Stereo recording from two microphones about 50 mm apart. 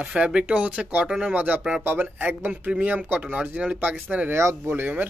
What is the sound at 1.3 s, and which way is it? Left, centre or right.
Speech, right.